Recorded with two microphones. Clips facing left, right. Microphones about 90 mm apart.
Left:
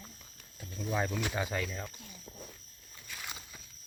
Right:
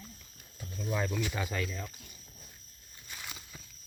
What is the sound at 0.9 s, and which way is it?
Speech, 20° left (ahead or behind).